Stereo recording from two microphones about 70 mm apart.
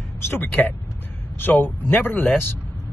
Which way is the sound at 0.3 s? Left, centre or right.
Left.